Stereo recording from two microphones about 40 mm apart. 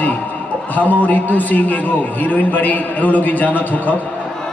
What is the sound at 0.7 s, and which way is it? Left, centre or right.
A man's voice, left.